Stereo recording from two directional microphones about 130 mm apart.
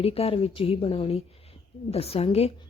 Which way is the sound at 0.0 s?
50° left (ahead or behind).